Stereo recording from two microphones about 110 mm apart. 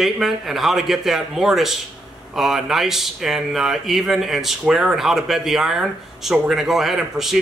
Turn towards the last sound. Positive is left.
turn(degrees=0)  # may be behind; listen again after turning